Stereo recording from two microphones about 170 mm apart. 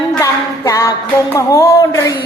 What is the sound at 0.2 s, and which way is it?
Music, 15° left (ahead or behind).